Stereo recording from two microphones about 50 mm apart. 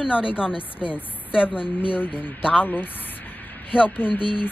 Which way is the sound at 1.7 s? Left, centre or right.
Left.